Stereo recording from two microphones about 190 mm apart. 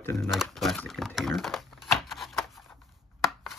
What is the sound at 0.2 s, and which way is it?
Typing, centre (ahead or behind).